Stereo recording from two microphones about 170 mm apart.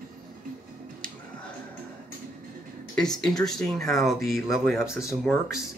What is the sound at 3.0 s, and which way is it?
Speech, 5° left (ahead or behind).